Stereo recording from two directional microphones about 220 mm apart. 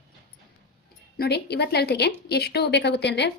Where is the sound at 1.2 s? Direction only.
50° left (ahead or behind).